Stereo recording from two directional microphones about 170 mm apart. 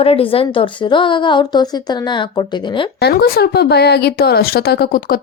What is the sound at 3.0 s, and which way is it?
Speech, 70° left (ahead or behind).